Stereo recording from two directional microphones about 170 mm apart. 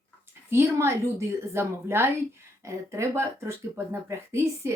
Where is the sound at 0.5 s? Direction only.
15° right (ahead or behind).